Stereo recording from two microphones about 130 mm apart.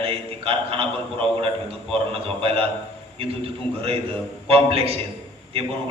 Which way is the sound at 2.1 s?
45° right (ahead or behind).